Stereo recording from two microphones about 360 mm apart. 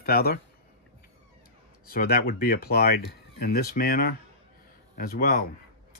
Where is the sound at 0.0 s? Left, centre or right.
Left.